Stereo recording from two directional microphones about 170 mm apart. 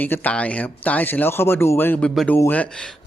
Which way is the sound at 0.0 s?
10° left (ahead or behind).